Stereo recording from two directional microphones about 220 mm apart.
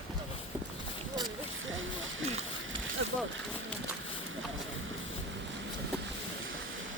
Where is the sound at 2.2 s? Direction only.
30° right (ahead or behind).